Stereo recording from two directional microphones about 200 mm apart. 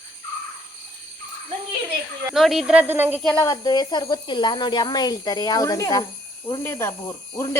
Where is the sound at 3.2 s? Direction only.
5° left (ahead or behind).